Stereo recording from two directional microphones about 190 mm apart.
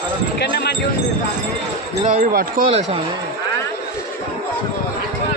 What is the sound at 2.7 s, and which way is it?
Speech, 35° right (ahead or behind).